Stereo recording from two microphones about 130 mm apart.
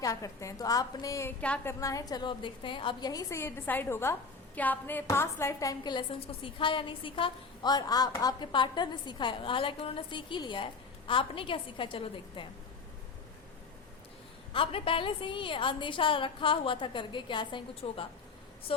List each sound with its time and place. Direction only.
0.0 s a woman's voice: 25° left (ahead or behind)
1.4 s a woman's voice: 10° left (ahead or behind)
1.8 s a woman's voice: 25° left (ahead or behind); by 12.5 s 45° left (ahead or behind)
14.5 s a woman's voice: 45° left (ahead or behind)